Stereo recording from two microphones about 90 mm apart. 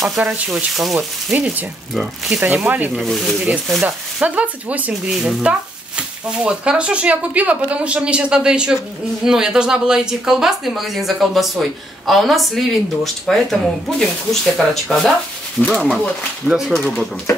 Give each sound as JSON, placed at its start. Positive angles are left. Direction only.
{"t": 0.2, "sound": "speech", "side_deg": -15}
{"t": 0.7, "sound": "speech", "side_deg": -5}
{"t": 2.4, "sound": "speech", "side_deg": -20}
{"t": 2.9, "sound": "speech", "side_deg": 0}
{"t": 3.8, "sound": "speech", "side_deg": -15}
{"t": 5.1, "sound": "speech", "side_deg": -5}
{"t": 16.4, "sound": "speech", "side_deg": 0}